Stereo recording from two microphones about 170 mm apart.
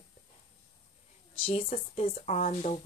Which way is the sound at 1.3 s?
30° left (ahead or behind).